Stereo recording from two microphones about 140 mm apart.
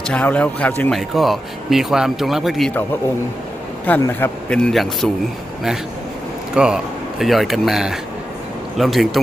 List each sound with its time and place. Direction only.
0.1 s a man's voice: 10° left (ahead or behind)
3.9 s a man's voice: 10° left (ahead or behind)
6.5 s speech: 5° right (ahead or behind)